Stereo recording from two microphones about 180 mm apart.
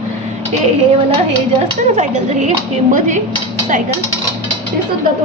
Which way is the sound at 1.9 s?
45° right (ahead or behind).